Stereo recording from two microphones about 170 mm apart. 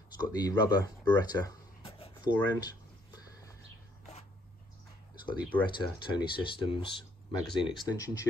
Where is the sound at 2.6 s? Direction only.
20° left (ahead or behind).